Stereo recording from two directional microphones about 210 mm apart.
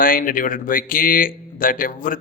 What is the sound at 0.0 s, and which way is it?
A man's voice, 40° left (ahead or behind).